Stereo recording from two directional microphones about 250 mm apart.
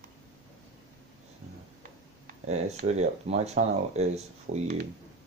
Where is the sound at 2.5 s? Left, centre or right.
Right.